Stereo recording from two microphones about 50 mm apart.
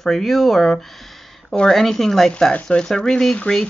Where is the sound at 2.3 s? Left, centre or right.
Left.